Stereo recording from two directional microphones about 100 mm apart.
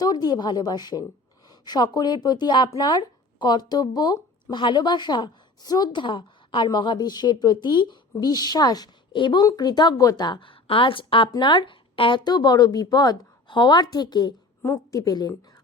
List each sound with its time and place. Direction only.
0.0 s speech: 40° left (ahead or behind)
9.4 s speech: 40° left (ahead or behind); by 12.2 s 60° left (ahead or behind)
12.2 s speech: 45° left (ahead or behind)
14.6 s a woman's voice: 30° left (ahead or behind)